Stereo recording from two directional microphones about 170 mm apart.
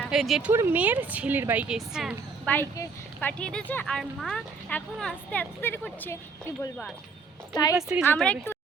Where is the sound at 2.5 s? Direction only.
10° left (ahead or behind).